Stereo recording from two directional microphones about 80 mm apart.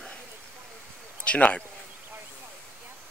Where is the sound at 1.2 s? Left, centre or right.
Centre.